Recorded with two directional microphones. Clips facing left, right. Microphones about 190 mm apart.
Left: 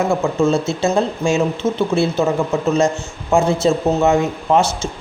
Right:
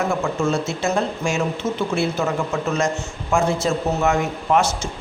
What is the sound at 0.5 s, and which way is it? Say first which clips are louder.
A man's voice: left 5 dB; 30° left (ahead or behind).